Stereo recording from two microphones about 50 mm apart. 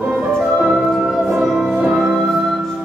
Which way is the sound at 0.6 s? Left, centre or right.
Centre.